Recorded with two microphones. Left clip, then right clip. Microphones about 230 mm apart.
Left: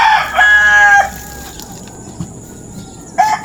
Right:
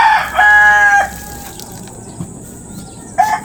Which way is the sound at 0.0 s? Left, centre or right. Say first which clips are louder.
Even; left.